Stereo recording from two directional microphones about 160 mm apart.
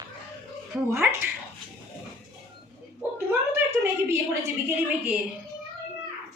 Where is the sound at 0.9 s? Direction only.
15° right (ahead or behind).